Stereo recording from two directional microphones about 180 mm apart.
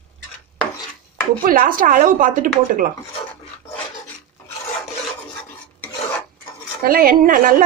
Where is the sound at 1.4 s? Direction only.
50° right (ahead or behind).